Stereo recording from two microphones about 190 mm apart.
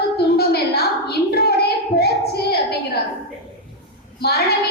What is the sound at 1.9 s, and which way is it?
Child singing, 55° left (ahead or behind).